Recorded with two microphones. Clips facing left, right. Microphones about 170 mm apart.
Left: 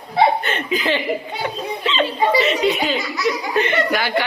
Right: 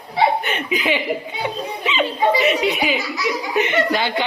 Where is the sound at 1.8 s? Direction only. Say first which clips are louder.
Even; 15° right (ahead or behind).